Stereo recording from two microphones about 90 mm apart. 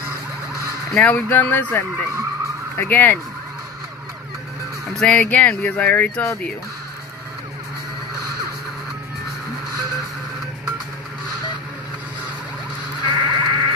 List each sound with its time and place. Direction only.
0.9 s speech: 15° left (ahead or behind)
4.9 s speech: 10° left (ahead or behind)
13.0 s music: 55° right (ahead or behind)